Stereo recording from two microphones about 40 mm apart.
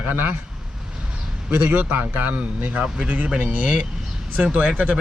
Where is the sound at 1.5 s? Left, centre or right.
Right.